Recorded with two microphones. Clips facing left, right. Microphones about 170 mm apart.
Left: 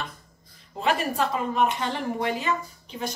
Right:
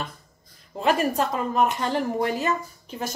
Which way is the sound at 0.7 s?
45° right (ahead or behind).